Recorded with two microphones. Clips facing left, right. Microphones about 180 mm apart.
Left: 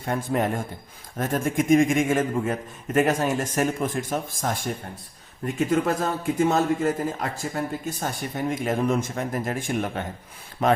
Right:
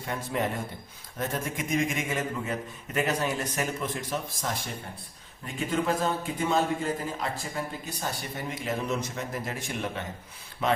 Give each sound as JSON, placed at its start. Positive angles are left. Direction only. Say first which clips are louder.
{"t": 0.0, "sound": "a man's voice", "louder": "left 5 dB", "side_deg": 50}